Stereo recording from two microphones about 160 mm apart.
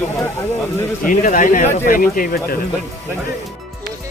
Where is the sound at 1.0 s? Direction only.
60° left (ahead or behind).